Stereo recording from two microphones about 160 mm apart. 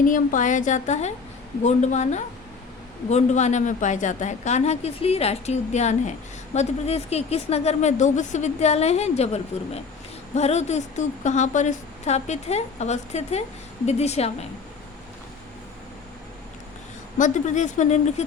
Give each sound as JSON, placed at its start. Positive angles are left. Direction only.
{"t": 0.0, "sound": "a woman's voice", "side_deg": 55}
{"t": 17.2, "sound": "a woman's voice", "side_deg": 50}